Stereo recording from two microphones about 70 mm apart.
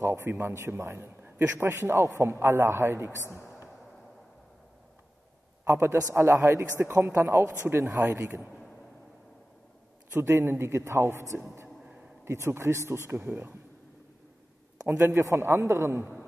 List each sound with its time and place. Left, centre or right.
0.0 s a man's voice: right
5.7 s a man's voice: right
10.2 s a man's voice: right
14.9 s a man's voice: right